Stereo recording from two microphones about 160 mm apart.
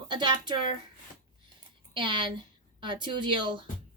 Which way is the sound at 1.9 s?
30° right (ahead or behind).